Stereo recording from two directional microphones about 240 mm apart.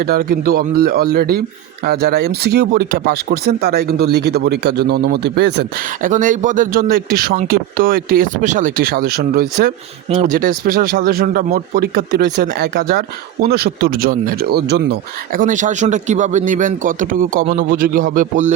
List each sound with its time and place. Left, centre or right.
0.0 s a man's voice: right